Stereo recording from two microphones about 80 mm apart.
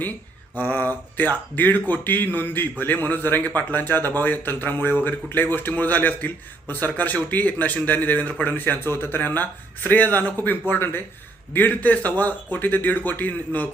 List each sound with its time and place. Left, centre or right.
0.5 s speech: left